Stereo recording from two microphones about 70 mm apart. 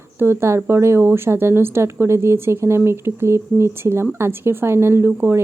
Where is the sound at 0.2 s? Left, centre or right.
Right.